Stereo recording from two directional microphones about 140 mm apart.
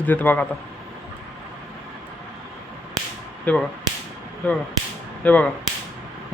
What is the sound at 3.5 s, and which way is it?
A man's voice, 10° left (ahead or behind).